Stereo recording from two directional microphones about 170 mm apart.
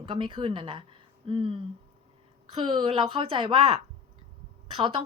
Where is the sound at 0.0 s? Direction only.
30° right (ahead or behind).